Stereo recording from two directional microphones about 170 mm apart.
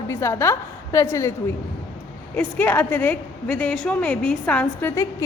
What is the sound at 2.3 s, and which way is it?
A woman's voice, 10° left (ahead or behind).